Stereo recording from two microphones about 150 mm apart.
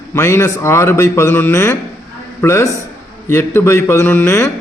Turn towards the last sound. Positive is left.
turn(degrees=15)  # may be behind; listen again after turning